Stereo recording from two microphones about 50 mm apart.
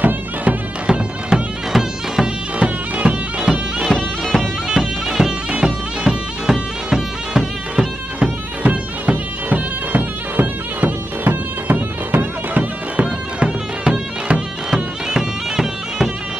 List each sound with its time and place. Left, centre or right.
0.8 s bagpipes: centre
1.7 s music: centre
2.6 s bagpipes: right
3.9 s bagpipes: centre
4.6 s bagpipes: centre
8.2 s bagpipes: right
13.0 s bagpipes: right